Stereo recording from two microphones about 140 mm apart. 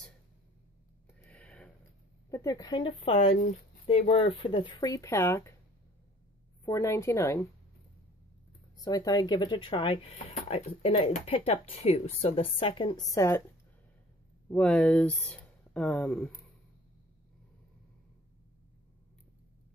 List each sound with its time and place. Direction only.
1.2 s a sound: 10° left (ahead or behind)
2.3 s a woman's voice: 25° left (ahead or behind)
6.6 s speech: 20° left (ahead or behind)
8.8 s a woman's voice: 25° left (ahead or behind)
13.1 s speech: 20° left (ahead or behind)
14.5 s speech: 10° left (ahead or behind)